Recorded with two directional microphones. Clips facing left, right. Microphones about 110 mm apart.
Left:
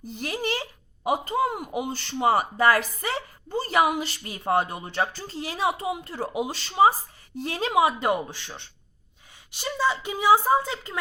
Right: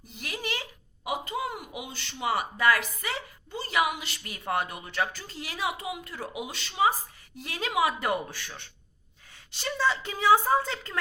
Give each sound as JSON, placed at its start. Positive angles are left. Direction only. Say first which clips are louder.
{"t": 0.0, "sound": "a woman's voice", "louder": "left 7 dB", "side_deg": 35}
{"t": 9.5, "sound": "speech", "louder": "left 2 dB", "side_deg": 15}